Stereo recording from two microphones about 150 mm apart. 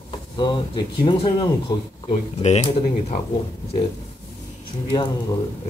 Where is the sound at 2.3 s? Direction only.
45° left (ahead or behind).